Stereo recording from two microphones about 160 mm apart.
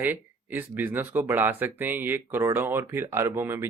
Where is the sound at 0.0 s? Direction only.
10° right (ahead or behind).